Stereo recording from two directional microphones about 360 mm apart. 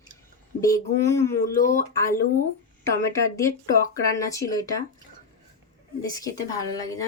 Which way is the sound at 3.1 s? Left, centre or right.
Centre.